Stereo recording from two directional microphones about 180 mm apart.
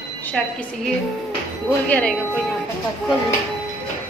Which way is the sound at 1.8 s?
10° left (ahead or behind).